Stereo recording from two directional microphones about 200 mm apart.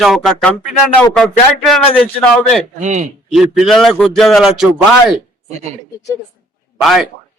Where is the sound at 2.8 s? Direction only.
35° right (ahead or behind).